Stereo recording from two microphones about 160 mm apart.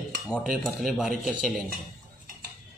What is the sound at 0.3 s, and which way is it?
Speech, centre (ahead or behind).